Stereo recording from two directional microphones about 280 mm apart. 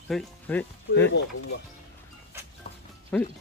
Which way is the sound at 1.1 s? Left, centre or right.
Left.